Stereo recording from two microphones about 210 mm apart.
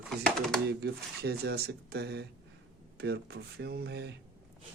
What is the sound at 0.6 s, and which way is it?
Speech, 50° right (ahead or behind).